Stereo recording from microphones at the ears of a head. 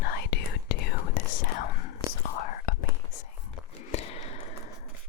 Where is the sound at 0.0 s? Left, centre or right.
Left.